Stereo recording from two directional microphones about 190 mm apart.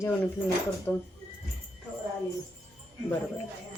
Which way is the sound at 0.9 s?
10° left (ahead or behind).